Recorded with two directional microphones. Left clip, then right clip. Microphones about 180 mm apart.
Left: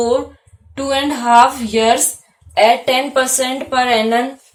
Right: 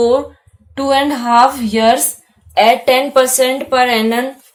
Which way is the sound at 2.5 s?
45° right (ahead or behind).